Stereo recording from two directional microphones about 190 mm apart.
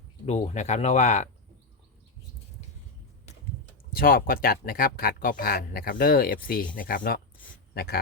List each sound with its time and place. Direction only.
0.3 s speech: 35° left (ahead or behind)
3.9 s speech: 50° left (ahead or behind)